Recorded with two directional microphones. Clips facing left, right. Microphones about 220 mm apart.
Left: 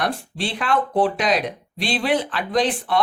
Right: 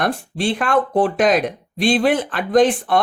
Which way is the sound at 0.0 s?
50° right (ahead or behind).